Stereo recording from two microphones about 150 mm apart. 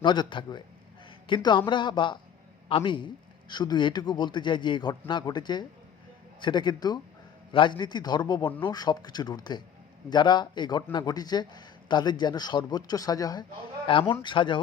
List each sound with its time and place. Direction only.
0.0 s a man's voice: 30° left (ahead or behind)